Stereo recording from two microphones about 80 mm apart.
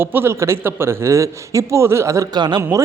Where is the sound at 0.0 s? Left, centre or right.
Right.